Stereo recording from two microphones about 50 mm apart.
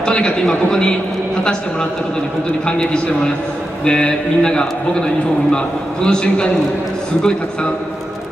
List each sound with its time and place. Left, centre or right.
0.0 s a man's voice: centre
2.6 s a man's voice: centre
6.0 s a man's voice: centre